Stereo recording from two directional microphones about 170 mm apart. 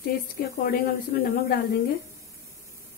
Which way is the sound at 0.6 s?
55° left (ahead or behind).